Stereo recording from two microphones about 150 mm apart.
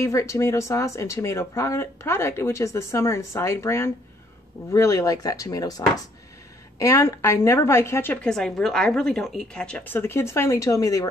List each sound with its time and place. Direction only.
0.0 s a woman's voice: 20° left (ahead or behind)